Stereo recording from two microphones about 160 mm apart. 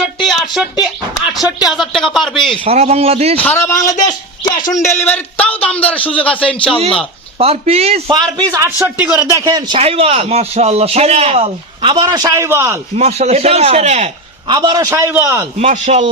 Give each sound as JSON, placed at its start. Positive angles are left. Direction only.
{"t": 0.2, "sound": "a sound", "side_deg": 0}
{"t": 1.3, "sound": "a man's voice", "side_deg": 0}
{"t": 2.6, "sound": "a man's voice", "side_deg": -40}
{"t": 3.3, "sound": "a man's voice", "side_deg": 10}
{"t": 4.8, "sound": "speech", "side_deg": 45}
{"t": 5.0, "sound": "a sound", "side_deg": 10}
{"t": 5.6, "sound": "a man's voice", "side_deg": 10}
{"t": 7.3, "sound": "a man's voice", "side_deg": -40}
{"t": 8.4, "sound": "a man's voice", "side_deg": -20}
{"t": 9.5, "sound": "a man's voice", "side_deg": -25}
{"t": 13.0, "sound": "a man's voice", "side_deg": -40}
{"t": 14.4, "sound": "a man's voice", "side_deg": -25}
{"t": 15.5, "sound": "a man's voice", "side_deg": -50}